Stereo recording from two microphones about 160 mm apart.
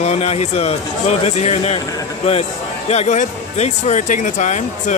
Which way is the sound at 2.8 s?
40° left (ahead or behind).